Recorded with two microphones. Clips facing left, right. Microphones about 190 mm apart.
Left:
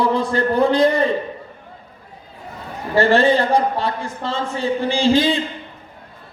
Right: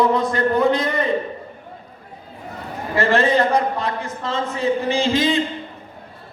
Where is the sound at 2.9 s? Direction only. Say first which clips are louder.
Left 3 dB; 30° left (ahead or behind).